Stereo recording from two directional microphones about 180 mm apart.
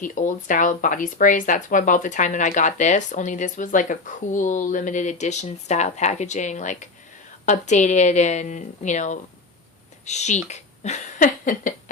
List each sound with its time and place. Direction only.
0.0 s a woman's voice: 45° left (ahead or behind)